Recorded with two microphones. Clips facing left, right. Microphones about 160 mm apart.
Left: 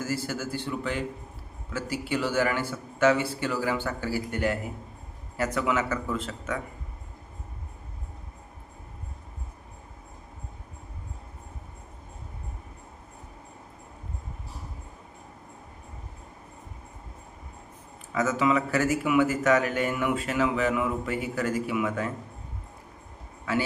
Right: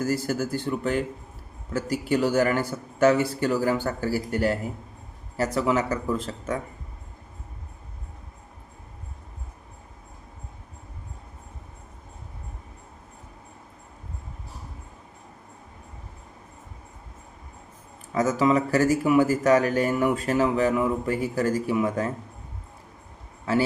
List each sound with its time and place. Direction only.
0.0 s a man's voice: 45° right (ahead or behind)
18.1 s speech: 35° right (ahead or behind)